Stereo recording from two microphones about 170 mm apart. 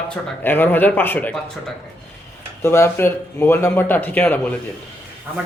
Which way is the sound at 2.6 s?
15° left (ahead or behind).